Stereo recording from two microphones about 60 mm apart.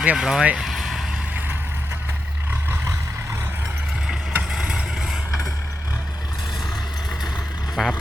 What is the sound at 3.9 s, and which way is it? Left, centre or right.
Vehicle, centre.